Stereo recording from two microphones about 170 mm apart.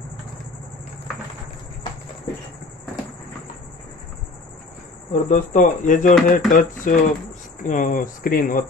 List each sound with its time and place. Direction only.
5.1 s speech: 50° left (ahead or behind)